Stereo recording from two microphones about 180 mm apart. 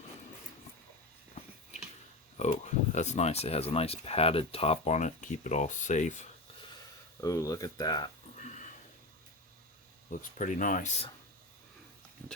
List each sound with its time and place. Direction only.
2.4 s speech: 40° left (ahead or behind)
7.2 s speech: 20° left (ahead or behind)
8.4 s a sound: 40° left (ahead or behind)
10.1 s speech: 45° left (ahead or behind)